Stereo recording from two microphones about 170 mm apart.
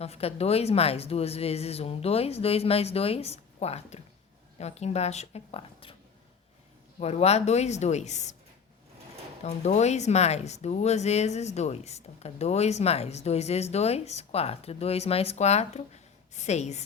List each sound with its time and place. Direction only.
0.0 s speech: 35° left (ahead or behind)
7.0 s speech: 40° left (ahead or behind)
9.4 s speech: 40° left (ahead or behind)